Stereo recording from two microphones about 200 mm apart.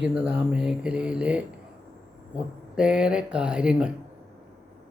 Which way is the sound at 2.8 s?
5° right (ahead or behind).